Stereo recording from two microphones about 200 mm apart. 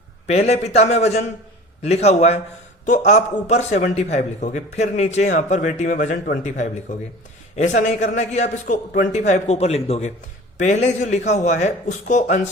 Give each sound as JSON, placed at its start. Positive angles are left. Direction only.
{"t": 0.3, "sound": "a man's voice", "side_deg": 35}